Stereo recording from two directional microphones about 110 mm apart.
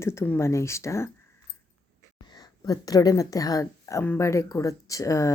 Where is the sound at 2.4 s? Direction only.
35° left (ahead or behind).